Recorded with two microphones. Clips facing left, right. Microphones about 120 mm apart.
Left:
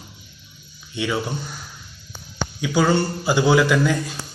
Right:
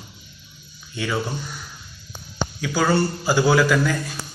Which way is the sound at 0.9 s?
15° left (ahead or behind).